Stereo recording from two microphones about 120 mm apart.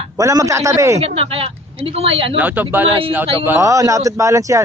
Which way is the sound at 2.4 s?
15° right (ahead or behind).